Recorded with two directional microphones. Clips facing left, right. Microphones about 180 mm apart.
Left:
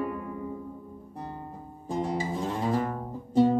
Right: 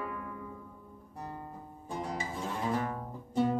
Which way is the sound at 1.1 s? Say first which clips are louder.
Left 3 dB; 30° left (ahead or behind).